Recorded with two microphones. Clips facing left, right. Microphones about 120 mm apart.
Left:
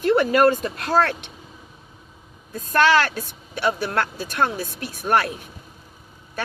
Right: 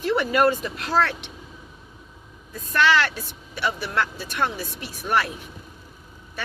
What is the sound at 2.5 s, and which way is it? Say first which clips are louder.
Speech: left 3 dB; 45° left (ahead or behind).